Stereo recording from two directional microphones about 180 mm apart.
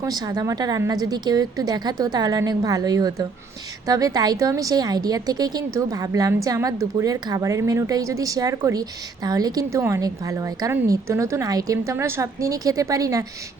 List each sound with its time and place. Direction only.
0.0 s a woman's voice: 20° right (ahead or behind)